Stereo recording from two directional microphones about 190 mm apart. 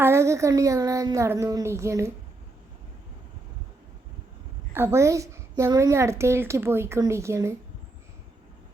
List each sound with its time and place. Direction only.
0.0 s a woman's voice: 15° right (ahead or behind)
4.7 s a woman's voice: 10° right (ahead or behind)